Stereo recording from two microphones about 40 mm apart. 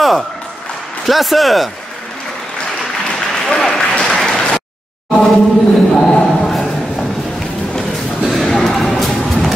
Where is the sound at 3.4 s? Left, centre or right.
Centre.